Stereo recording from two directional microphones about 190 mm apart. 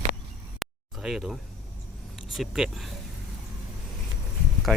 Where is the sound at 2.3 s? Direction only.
Centre (ahead or behind).